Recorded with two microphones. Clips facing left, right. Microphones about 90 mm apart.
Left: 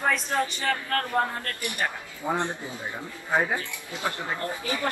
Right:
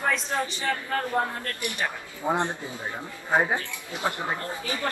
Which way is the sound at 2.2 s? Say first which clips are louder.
Right 2 dB; 20° right (ahead or behind).